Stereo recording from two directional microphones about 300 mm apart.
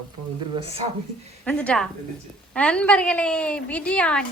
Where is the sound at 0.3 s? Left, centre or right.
Centre.